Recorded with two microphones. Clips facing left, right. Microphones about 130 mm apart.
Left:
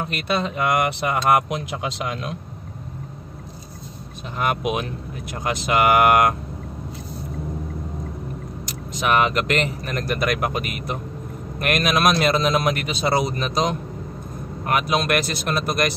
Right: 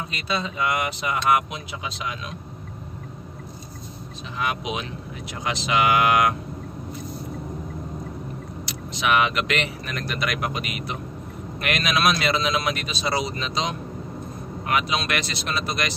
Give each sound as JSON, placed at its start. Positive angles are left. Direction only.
{"t": 0.0, "sound": "speech", "side_deg": 65}
{"t": 4.4, "sound": "speech", "side_deg": 50}
{"t": 8.6, "sound": "speech", "side_deg": 45}